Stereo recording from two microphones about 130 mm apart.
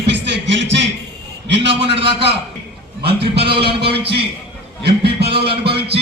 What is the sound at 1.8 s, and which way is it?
Speech, 45° right (ahead or behind).